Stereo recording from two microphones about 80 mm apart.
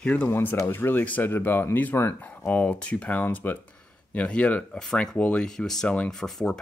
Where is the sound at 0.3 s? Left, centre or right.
Left.